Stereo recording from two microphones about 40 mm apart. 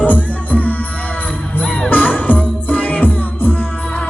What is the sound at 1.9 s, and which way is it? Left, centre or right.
Music, left.